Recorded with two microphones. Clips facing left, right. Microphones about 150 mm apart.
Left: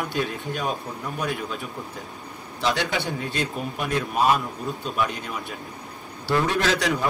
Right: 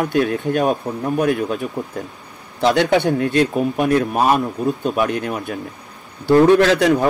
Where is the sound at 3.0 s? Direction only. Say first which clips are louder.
Right 11 dB; 50° right (ahead or behind).